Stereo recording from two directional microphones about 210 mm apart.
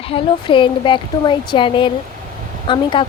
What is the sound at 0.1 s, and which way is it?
A woman's voice, 25° left (ahead or behind).